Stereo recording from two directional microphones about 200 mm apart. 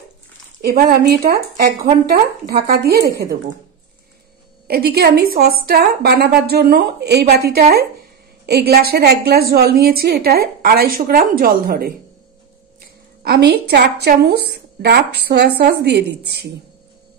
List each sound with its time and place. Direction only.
0.6 s a woman's voice: 50° right (ahead or behind)
4.6 s a woman's voice: 50° right (ahead or behind)
13.2 s a woman's voice: 55° right (ahead or behind)